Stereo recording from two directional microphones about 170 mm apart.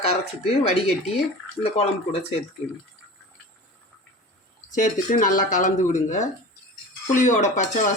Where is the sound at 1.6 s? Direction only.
35° left (ahead or behind).